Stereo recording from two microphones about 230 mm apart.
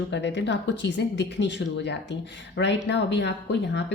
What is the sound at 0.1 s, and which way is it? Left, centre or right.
A woman's voice, left.